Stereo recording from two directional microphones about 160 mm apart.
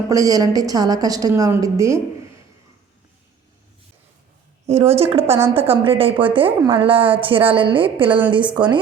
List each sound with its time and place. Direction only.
0.1 s a woman's voice: 20° right (ahead or behind)
4.6 s a woman's voice: 40° right (ahead or behind)